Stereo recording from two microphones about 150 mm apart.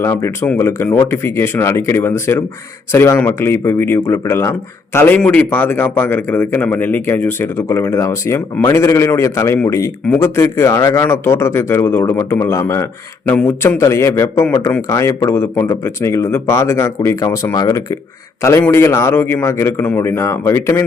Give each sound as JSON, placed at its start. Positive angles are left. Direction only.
{"t": 0.0, "sound": "a man's voice", "side_deg": 15}